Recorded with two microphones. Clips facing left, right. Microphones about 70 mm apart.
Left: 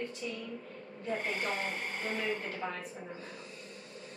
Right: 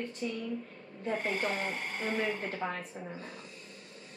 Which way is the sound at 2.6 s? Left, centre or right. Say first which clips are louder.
Right 4 dB; right.